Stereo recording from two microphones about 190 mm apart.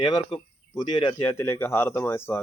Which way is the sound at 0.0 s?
20° left (ahead or behind).